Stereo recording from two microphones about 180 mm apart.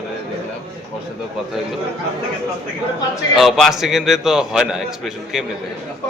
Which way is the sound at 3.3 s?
Centre (ahead or behind).